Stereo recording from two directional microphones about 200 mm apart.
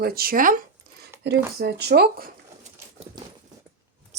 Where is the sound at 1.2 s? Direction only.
55° right (ahead or behind).